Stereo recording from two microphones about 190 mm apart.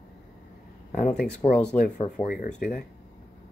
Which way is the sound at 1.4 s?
20° left (ahead or behind).